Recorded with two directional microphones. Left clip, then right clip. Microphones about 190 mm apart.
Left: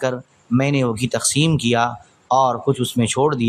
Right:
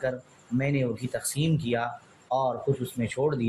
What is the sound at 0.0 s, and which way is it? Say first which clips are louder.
Speech: left 8 dB; 30° left (ahead or behind).